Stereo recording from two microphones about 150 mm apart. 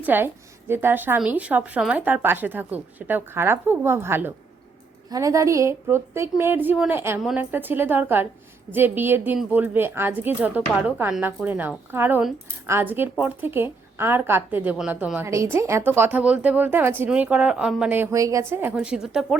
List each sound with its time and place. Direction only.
0.0 s speech: 15° right (ahead or behind)